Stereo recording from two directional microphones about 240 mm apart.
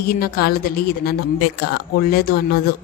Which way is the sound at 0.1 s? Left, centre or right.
Left.